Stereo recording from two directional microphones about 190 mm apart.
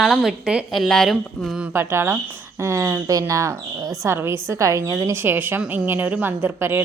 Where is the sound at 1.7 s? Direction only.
15° right (ahead or behind).